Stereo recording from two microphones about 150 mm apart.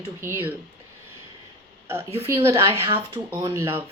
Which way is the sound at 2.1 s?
45° right (ahead or behind).